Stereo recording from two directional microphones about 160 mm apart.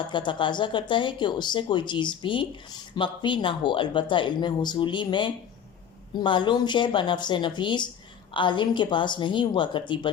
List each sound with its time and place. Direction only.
0.1 s speech: 30° left (ahead or behind)